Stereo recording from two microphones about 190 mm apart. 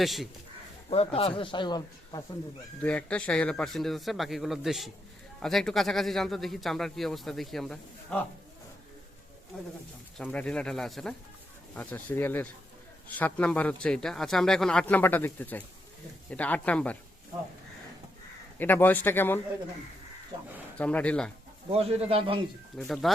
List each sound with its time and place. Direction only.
0.0 s speech: centre (ahead or behind)
0.9 s speech: 30° left (ahead or behind)
2.8 s speech: 5° left (ahead or behind)
10.2 s speech: 5° left (ahead or behind)
18.6 s speech: 10° left (ahead or behind)
20.7 s speech: 5° left (ahead or behind)
21.7 s speech: 30° right (ahead or behind)
22.9 s speech: centre (ahead or behind)